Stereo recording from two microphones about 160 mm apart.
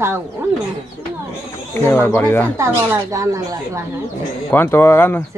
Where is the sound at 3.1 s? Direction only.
20° right (ahead or behind).